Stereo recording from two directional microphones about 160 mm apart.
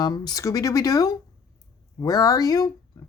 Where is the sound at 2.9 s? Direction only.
20° left (ahead or behind).